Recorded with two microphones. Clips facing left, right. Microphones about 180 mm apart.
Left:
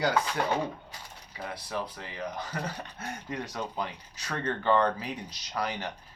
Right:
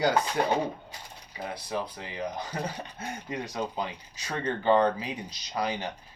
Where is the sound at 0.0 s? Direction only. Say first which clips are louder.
Right 2 dB; 20° right (ahead or behind).